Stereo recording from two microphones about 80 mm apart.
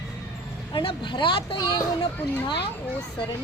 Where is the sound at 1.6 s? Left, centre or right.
Left.